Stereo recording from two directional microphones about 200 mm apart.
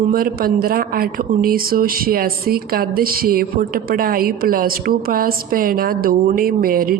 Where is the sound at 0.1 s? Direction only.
45° right (ahead or behind).